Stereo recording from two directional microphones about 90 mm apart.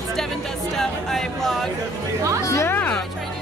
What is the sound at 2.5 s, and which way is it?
Speech, 30° left (ahead or behind).